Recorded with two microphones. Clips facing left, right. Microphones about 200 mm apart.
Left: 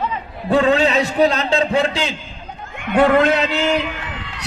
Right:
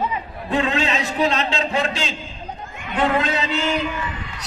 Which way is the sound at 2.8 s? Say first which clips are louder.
Left 7 dB; 65° left (ahead or behind).